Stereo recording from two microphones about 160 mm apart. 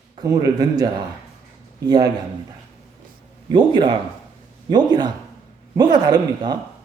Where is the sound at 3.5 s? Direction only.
30° right (ahead or behind).